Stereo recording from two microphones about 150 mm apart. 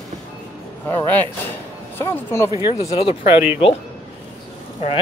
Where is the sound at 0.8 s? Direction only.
10° left (ahead or behind).